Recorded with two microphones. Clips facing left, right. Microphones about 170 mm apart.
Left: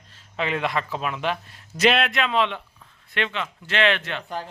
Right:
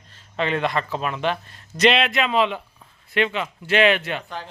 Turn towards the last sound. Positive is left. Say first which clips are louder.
# right 4 dB
turn(degrees=-10)  # may be behind; listen again after turning